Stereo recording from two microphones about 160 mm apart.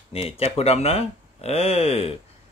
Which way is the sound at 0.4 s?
40° left (ahead or behind).